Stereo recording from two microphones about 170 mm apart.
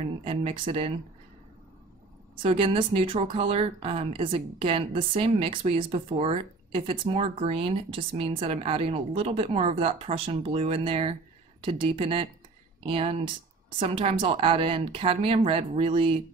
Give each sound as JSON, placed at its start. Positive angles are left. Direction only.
{"t": 0.0, "sound": "speech", "side_deg": -35}
{"t": 2.4, "sound": "speech", "side_deg": -30}